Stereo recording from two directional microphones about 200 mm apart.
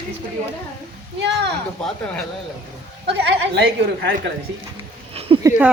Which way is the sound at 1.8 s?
5° left (ahead or behind).